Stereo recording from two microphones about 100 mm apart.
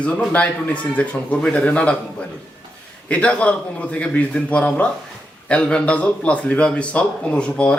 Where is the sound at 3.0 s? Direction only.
15° left (ahead or behind).